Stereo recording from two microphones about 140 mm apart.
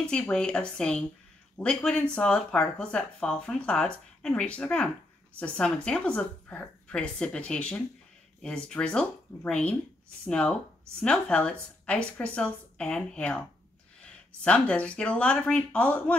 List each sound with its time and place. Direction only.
0.0 s speech: 5° left (ahead or behind)